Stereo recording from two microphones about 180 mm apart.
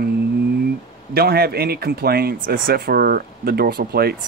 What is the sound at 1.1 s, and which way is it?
Speech, 60° right (ahead or behind).